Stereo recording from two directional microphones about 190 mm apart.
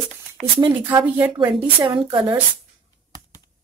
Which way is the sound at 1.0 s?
10° right (ahead or behind).